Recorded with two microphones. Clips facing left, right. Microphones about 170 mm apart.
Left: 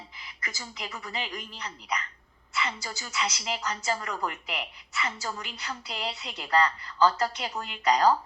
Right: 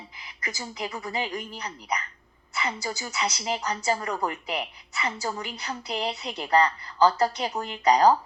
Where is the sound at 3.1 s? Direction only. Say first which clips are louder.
Right 2 dB; 35° right (ahead or behind).